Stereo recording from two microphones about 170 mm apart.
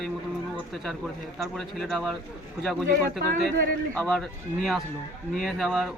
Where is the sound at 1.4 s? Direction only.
Centre (ahead or behind).